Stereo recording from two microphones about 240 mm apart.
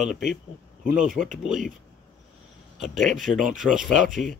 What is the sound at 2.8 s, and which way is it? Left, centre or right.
Speech, centre.